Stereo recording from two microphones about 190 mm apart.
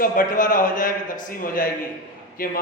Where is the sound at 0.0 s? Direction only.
45° left (ahead or behind).